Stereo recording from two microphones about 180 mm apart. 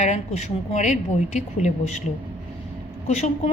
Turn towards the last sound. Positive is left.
turn(degrees=40)  # may be behind; listen again after turning